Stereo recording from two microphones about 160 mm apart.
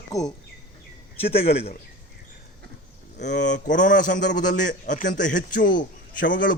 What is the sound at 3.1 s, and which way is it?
A man's voice, 50° left (ahead or behind).